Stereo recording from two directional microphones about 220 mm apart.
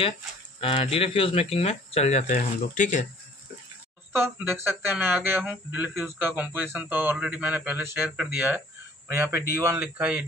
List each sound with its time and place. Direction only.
0.6 s speech: 25° left (ahead or behind)
4.2 s speech: 10° right (ahead or behind)